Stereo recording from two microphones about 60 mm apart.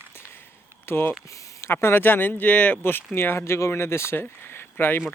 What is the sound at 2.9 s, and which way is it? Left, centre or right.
Speech, left.